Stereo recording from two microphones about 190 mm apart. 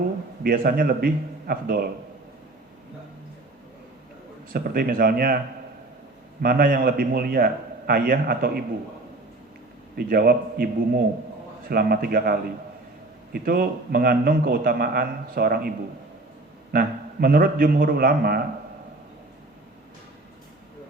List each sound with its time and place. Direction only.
0.4 s a man's voice: 50° right (ahead or behind)
4.5 s a man's voice: 50° right (ahead or behind)
6.4 s a man's voice: 50° right (ahead or behind)
9.9 s a man's voice: 50° right (ahead or behind)
16.7 s a man's voice: 50° right (ahead or behind)